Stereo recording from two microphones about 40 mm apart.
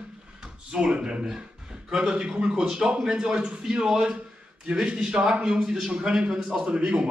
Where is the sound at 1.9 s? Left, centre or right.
Centre.